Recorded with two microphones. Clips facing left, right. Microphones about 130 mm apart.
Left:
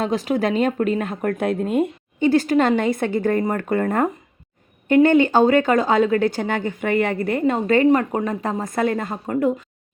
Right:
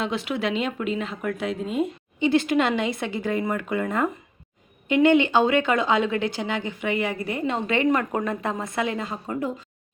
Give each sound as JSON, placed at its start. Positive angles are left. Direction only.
{"t": 0.0, "sound": "speech", "side_deg": 40}